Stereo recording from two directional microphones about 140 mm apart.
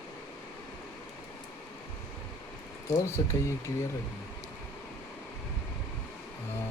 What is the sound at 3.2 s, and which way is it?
Speech, 25° left (ahead or behind).